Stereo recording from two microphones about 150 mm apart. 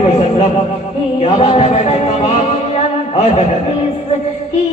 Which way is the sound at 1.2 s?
40° left (ahead or behind).